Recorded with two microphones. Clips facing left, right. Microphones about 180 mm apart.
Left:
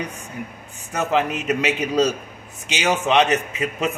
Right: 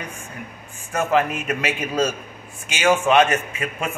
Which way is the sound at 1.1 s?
20° left (ahead or behind).